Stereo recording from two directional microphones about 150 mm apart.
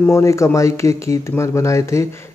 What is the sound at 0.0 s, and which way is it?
Speech, 20° left (ahead or behind).